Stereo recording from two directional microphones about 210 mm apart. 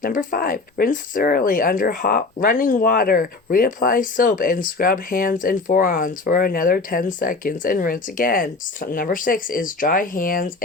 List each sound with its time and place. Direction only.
0.0 s speech: 40° left (ahead or behind)